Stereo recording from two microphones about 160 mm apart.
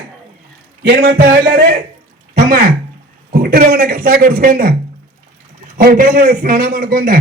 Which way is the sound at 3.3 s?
65° right (ahead or behind).